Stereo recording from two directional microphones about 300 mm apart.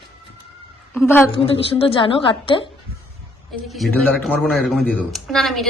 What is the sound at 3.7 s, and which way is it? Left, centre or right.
Speech, centre.